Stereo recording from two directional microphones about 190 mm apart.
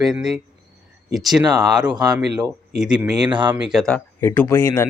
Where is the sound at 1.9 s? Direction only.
20° right (ahead or behind).